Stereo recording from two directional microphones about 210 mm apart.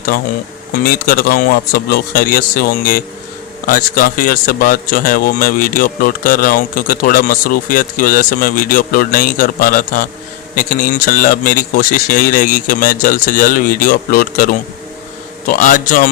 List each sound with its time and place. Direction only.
0.1 s speech: 45° left (ahead or behind)